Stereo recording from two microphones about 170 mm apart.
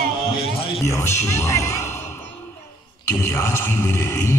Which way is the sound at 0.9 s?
15° left (ahead or behind).